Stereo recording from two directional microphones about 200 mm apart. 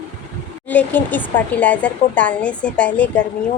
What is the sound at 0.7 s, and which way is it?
Speech, 10° left (ahead or behind).